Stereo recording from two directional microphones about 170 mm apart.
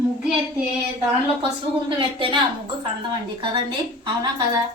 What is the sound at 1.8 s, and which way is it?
A woman's voice, 30° right (ahead or behind).